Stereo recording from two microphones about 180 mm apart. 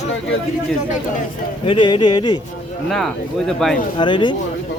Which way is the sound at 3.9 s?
25° left (ahead or behind).